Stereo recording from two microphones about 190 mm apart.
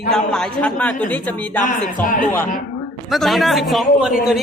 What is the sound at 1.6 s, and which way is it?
Speech, 45° left (ahead or behind).